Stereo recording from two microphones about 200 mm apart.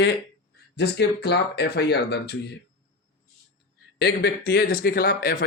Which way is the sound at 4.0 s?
50° left (ahead or behind).